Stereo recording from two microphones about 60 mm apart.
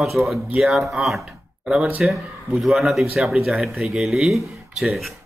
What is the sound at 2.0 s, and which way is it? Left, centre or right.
Speech, centre.